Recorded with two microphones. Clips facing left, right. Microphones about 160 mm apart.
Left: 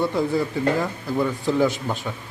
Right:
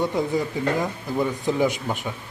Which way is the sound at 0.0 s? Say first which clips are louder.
Left 1 dB; 15° right (ahead or behind).